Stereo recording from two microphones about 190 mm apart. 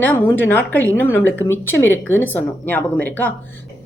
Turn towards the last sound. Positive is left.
turn(degrees=10)  # may be behind; listen again after turning